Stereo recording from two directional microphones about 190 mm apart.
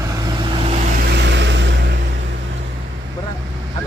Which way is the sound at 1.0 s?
65° right (ahead or behind).